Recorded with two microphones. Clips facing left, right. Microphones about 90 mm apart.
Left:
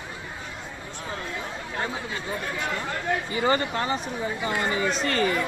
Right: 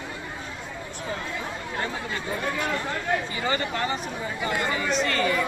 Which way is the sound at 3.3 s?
35° left (ahead or behind).